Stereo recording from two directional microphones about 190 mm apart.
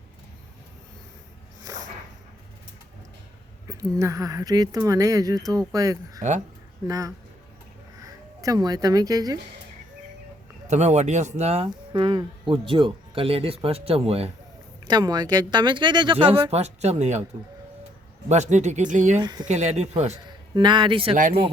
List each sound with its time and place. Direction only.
3.7 s speech: 15° right (ahead or behind)
10.7 s speech: 35° right (ahead or behind)
14.8 s speech: 20° right (ahead or behind); by 17.2 s 35° right (ahead or behind)
18.3 s speech: 35° right (ahead or behind)
19.2 s speech: 20° right (ahead or behind)
19.5 s speech: 35° right (ahead or behind)
20.1 s a man's voice: 25° right (ahead or behind)